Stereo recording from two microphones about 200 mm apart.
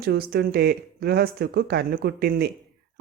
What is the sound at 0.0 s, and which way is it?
Speech, 50° right (ahead or behind).